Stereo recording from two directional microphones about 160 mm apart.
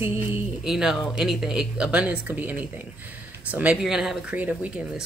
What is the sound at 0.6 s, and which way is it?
Speech, 5° right (ahead or behind).